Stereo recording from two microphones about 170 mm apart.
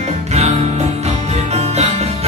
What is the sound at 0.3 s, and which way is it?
Music, 40° right (ahead or behind).